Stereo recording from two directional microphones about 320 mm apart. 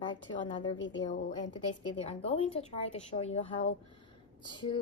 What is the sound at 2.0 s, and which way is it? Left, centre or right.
A woman's voice, centre.